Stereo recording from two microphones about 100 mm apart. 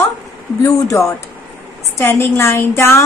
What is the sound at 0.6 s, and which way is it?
A woman's voice, 35° left (ahead or behind).